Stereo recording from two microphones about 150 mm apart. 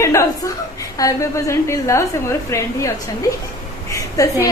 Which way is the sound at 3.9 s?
20° left (ahead or behind).